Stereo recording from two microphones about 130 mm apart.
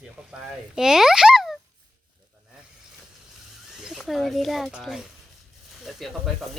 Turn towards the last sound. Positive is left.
turn(degrees=0)  # may be behind; listen again after turning